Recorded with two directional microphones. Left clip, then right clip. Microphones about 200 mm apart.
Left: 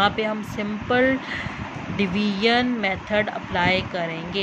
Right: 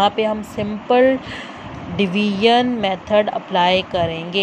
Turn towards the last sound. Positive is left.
turn(degrees=-20)  # may be behind; listen again after turning